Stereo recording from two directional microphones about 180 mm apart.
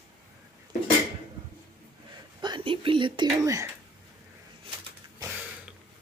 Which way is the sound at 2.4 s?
25° right (ahead or behind).